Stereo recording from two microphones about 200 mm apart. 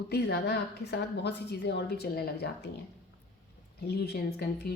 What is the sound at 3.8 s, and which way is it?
Speech, 55° left (ahead or behind).